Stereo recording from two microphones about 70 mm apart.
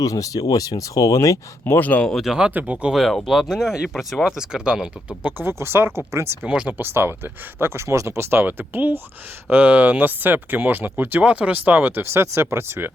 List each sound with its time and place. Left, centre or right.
0.0 s speech: left
1.6 s speech: left
2.2 s speech: centre
2.5 s speech: right
2.9 s speech: centre
5.2 s speech: right
6.5 s speech: centre
6.7 s speech: right